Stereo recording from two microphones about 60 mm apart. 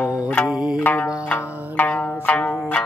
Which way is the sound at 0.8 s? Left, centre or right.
Left.